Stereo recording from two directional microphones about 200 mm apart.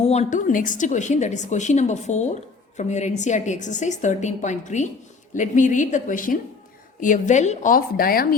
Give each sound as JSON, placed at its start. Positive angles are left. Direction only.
{"t": 0.0, "sound": "a woman's voice", "side_deg": 35}